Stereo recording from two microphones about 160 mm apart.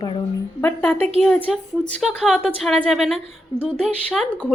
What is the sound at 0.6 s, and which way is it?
Speech, 15° left (ahead or behind).